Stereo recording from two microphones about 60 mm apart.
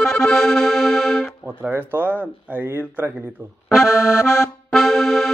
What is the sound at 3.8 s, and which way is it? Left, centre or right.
Accordion, left.